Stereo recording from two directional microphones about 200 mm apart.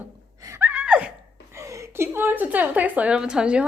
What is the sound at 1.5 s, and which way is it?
A woman's voice, 15° right (ahead or behind).